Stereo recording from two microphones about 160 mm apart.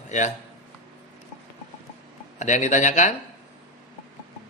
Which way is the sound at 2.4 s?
50° left (ahead or behind).